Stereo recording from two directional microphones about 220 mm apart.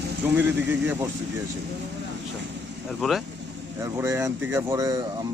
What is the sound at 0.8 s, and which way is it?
Speech, 10° right (ahead or behind).